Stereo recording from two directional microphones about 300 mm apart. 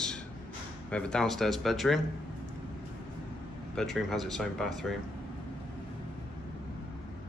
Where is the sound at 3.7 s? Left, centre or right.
Centre.